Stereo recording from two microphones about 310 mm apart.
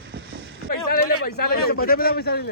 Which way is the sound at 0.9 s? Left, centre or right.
Left.